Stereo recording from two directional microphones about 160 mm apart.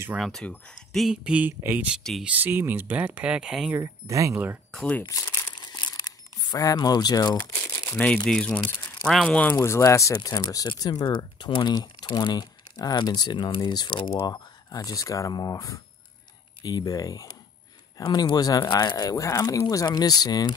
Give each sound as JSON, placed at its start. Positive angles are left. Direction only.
{"t": 0.2, "sound": "speech", "side_deg": 5}
{"t": 2.0, "sound": "speech", "side_deg": 0}
{"t": 2.3, "sound": "speech", "side_deg": -15}
{"t": 3.7, "sound": "speech", "side_deg": -20}
{"t": 4.6, "sound": "speech", "side_deg": 5}
{"t": 5.0, "sound": "crumpling", "side_deg": 20}
{"t": 8.0, "sound": "speech", "side_deg": 5}